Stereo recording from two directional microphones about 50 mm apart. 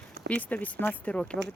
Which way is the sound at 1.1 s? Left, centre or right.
Centre.